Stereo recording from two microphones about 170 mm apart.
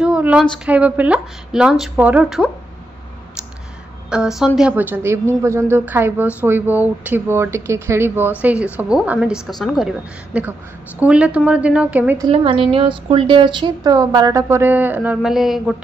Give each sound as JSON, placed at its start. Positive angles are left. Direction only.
{"t": 0.0, "sound": "a sound", "side_deg": -5}
{"t": 0.7, "sound": "a woman's voice", "side_deg": -10}
{"t": 4.1, "sound": "a woman's voice", "side_deg": -5}
{"t": 12.3, "sound": "a woman's voice", "side_deg": -30}